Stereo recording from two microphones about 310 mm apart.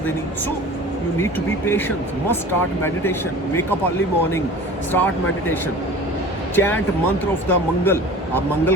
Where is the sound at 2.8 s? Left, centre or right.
Centre.